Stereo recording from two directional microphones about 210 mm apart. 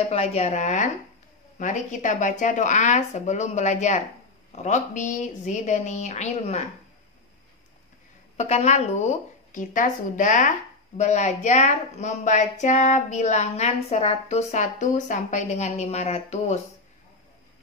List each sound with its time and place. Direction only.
0.1 s speech: 30° left (ahead or behind)
8.4 s speech: 30° left (ahead or behind)